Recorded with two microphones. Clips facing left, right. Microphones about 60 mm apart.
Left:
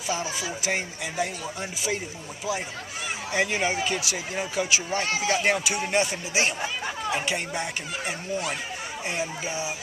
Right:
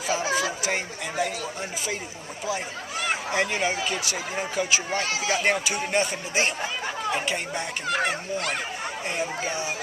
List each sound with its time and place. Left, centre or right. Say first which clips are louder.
0.2 s a sound: right 6 dB; right
0.6 s speech: even; centre
3.3 s speech: left 2 dB; centre
7.9 s speech: right 9 dB; right
9.1 s speech: right 1 dB; centre